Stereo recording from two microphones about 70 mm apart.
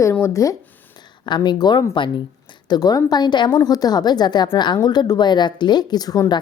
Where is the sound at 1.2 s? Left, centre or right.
Left.